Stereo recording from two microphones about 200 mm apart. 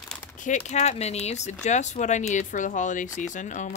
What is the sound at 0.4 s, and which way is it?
Speech, 35° left (ahead or behind).